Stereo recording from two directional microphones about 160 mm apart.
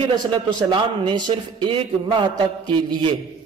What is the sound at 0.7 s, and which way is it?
A man's voice, 30° right (ahead or behind).